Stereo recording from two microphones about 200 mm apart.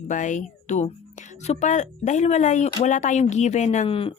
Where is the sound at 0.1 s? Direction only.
40° left (ahead or behind).